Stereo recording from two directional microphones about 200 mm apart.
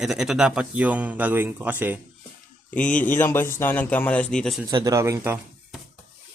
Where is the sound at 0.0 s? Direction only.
Centre (ahead or behind).